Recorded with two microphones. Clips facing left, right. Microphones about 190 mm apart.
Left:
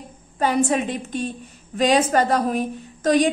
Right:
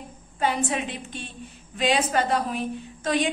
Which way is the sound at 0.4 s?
45° left (ahead or behind).